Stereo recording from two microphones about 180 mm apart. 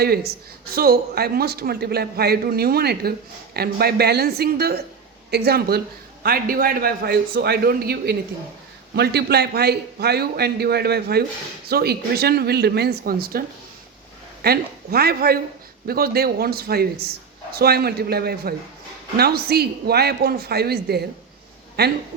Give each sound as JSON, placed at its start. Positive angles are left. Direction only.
{"t": 0.0, "sound": "a man's voice", "side_deg": -60}
{"t": 14.4, "sound": "a man's voice", "side_deg": -60}